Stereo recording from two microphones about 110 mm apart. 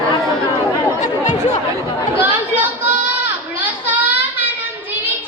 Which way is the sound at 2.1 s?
15° right (ahead or behind).